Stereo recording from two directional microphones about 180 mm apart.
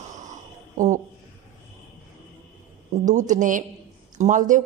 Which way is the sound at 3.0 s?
45° right (ahead or behind).